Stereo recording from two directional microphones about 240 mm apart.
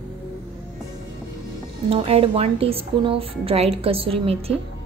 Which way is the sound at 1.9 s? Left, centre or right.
Right.